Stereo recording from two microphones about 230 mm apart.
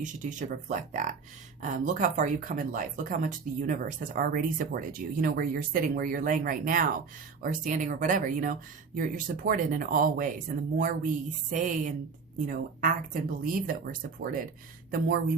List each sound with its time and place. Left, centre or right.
0.0 s speech: right